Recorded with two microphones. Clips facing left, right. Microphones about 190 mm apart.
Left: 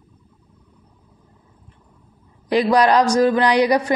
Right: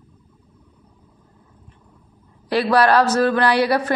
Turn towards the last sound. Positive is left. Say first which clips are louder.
# left 2 dB
turn(degrees=15)  # may be behind; listen again after turning